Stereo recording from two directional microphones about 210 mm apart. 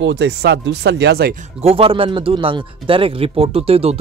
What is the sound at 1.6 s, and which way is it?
Speech, 25° right (ahead or behind).